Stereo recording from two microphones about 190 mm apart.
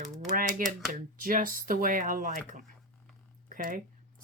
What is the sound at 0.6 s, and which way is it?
Speech, 45° right (ahead or behind).